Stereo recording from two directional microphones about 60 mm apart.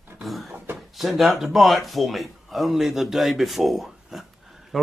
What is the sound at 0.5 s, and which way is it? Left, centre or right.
Speech, right.